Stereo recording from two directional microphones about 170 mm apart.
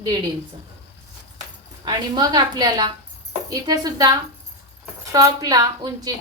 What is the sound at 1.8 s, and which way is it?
A woman's voice, 25° right (ahead or behind).